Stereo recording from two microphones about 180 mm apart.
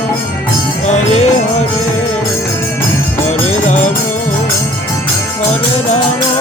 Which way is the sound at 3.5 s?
40° left (ahead or behind).